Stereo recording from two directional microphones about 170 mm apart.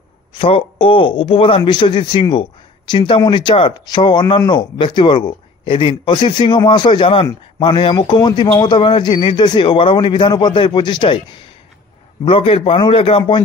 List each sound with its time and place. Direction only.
0.3 s speech: 30° left (ahead or behind)
12.3 s a man's voice: 35° left (ahead or behind)